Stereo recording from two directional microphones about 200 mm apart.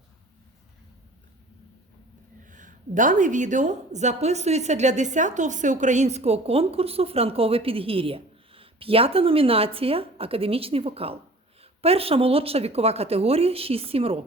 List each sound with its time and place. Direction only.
2.4 s a woman's voice: 40° right (ahead or behind)